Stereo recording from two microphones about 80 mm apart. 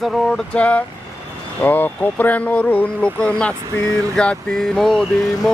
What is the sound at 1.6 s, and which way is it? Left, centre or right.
Speech, left.